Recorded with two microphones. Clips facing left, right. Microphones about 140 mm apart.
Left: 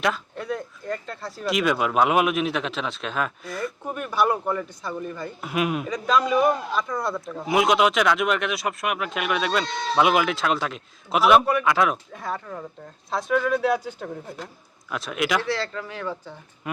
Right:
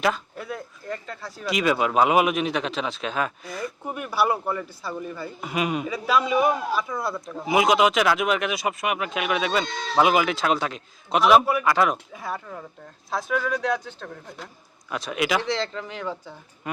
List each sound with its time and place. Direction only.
0.0 s speech: centre (ahead or behind)
14.8 s speech: centre (ahead or behind)
15.4 s speech: 20° right (ahead or behind)